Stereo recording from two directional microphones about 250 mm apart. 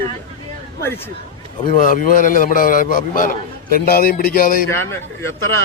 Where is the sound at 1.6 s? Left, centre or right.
Left.